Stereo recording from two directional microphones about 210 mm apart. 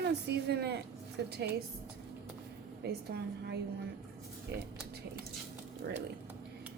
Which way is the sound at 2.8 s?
50° right (ahead or behind).